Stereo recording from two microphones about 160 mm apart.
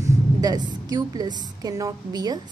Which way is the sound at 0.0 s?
25° right (ahead or behind).